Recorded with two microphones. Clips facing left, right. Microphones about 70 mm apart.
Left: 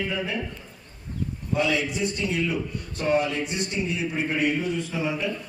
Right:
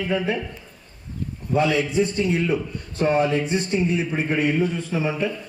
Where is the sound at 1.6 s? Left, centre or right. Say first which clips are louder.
Right 5 dB; right.